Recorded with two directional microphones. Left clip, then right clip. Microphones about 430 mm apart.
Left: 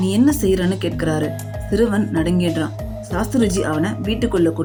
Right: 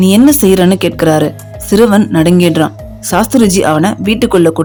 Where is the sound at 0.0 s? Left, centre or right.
Right.